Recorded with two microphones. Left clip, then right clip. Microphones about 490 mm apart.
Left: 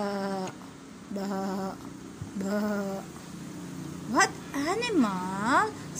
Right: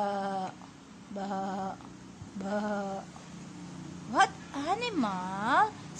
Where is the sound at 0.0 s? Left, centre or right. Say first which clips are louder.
Even; right.